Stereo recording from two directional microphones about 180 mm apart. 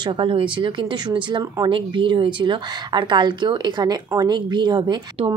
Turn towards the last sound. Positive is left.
turn(degrees=-25)  # may be behind; listen again after turning